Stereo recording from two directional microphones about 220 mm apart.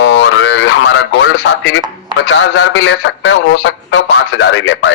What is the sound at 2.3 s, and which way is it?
A man's voice, 60° left (ahead or behind).